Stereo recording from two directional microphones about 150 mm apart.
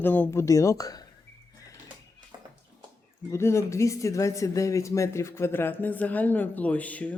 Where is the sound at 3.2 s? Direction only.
20° left (ahead or behind).